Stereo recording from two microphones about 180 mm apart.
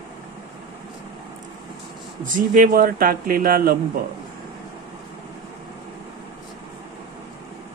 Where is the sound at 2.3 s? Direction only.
50° right (ahead or behind).